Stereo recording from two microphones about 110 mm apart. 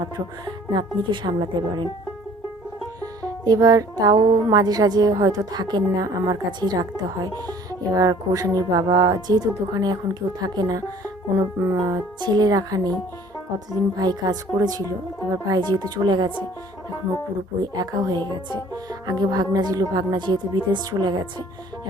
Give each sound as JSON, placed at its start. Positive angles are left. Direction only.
{"t": 0.7, "sound": "speech", "side_deg": -45}
{"t": 3.0, "sound": "music", "side_deg": -35}
{"t": 4.4, "sound": "a woman's voice", "side_deg": -35}
{"t": 11.6, "sound": "music", "side_deg": -30}
{"t": 12.2, "sound": "a woman's voice", "side_deg": -40}
{"t": 17.6, "sound": "a woman's voice", "side_deg": -40}